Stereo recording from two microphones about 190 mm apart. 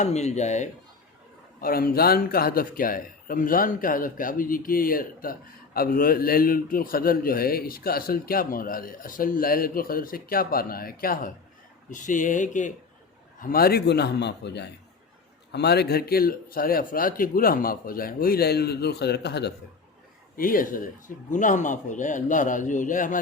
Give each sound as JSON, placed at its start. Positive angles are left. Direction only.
{"t": 0.0, "sound": "speech", "side_deg": 35}
{"t": 1.6, "sound": "a man's voice", "side_deg": 50}
{"t": 13.4, "sound": "a man's voice", "side_deg": 50}
{"t": 20.3, "sound": "speech", "side_deg": 45}